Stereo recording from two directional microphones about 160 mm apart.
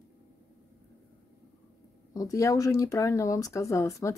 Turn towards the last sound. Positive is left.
turn(degrees=20)  # may be behind; listen again after turning